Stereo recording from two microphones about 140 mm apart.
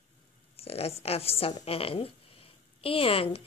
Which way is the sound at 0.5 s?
45° left (ahead or behind).